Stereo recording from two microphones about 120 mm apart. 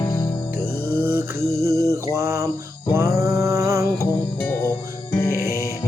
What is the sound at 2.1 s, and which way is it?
Mantra, 25° right (ahead or behind).